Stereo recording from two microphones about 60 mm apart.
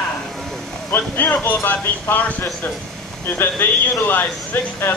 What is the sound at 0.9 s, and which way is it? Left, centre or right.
Speech, left.